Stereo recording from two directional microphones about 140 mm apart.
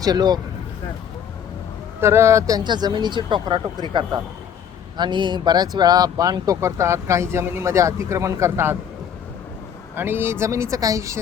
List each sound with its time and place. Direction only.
0.0 s speech: 30° right (ahead or behind)
2.0 s speech: 20° right (ahead or behind)
9.9 s speech: 15° right (ahead or behind)